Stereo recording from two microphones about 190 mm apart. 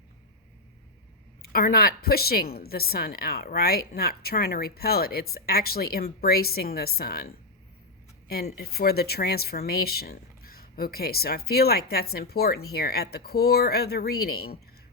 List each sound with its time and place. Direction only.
1.4 s a woman's voice: 50° left (ahead or behind)
8.3 s speech: 55° left (ahead or behind)